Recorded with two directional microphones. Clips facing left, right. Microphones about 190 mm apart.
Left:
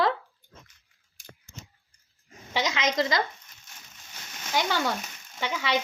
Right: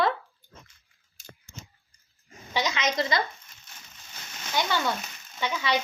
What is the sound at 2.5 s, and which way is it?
Sizzle, 90° left.